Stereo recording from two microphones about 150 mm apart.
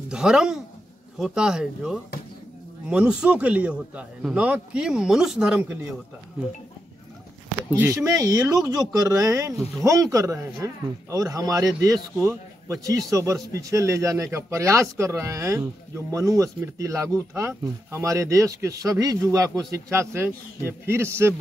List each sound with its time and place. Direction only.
0.1 s a man's voice: 5° right (ahead or behind)
7.7 s a man's voice: 15° right (ahead or behind)